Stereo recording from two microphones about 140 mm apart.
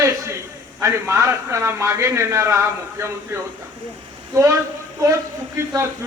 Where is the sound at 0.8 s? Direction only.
20° right (ahead or behind).